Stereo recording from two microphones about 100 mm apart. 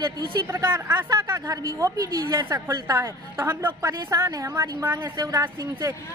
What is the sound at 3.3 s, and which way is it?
Speech, 25° right (ahead or behind).